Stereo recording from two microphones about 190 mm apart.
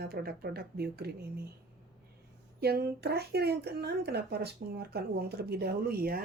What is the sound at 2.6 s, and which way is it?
Speech, 55° right (ahead or behind).